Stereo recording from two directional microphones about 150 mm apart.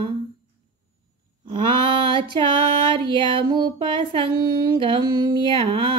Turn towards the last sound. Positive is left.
turn(degrees=-35)  # may be behind; listen again after turning